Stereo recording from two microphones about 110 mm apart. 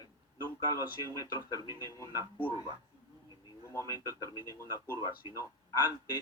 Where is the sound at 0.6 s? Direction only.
30° left (ahead or behind).